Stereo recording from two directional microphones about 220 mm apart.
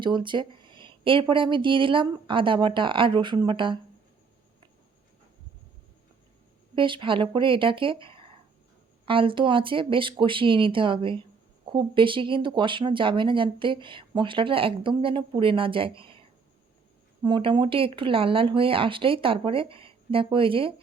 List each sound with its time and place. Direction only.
0.0 s speech: 20° right (ahead or behind)
6.7 s speech: 20° right (ahead or behind)
17.2 s speech: 20° right (ahead or behind)